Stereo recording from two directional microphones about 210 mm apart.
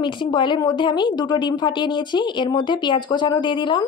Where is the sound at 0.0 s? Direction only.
20° left (ahead or behind).